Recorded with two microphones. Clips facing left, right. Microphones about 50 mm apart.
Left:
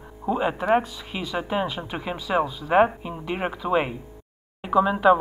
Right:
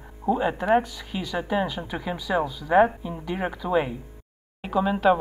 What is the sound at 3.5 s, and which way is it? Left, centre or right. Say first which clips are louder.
Speech: left 1 dB; left.